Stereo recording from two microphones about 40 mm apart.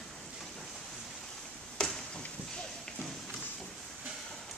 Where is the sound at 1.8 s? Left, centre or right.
Left.